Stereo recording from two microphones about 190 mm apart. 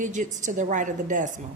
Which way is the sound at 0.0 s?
40° right (ahead or behind).